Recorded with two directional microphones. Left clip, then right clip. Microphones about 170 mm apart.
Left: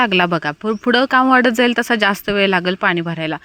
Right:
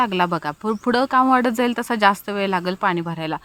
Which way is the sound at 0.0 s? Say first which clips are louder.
Left 5 dB; 20° left (ahead or behind).